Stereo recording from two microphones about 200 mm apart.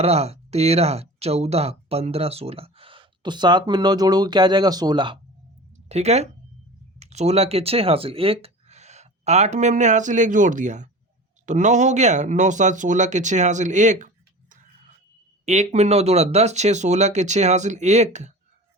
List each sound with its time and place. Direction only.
0.0 s speech: 30° right (ahead or behind)
15.4 s speech: 35° right (ahead or behind)